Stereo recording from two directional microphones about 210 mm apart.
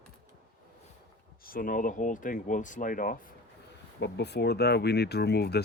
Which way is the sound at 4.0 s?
55° left (ahead or behind).